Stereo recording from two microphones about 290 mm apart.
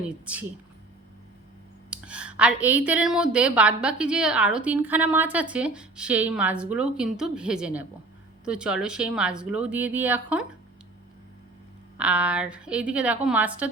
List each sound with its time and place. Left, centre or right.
1.9 s a woman's voice: centre
11.9 s a woman's voice: centre